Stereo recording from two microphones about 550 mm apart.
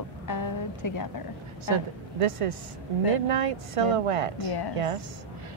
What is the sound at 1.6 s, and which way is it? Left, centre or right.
A woman's voice, right.